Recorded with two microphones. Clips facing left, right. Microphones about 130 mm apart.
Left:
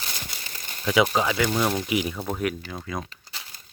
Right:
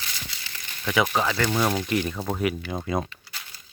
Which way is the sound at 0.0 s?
50° left (ahead or behind).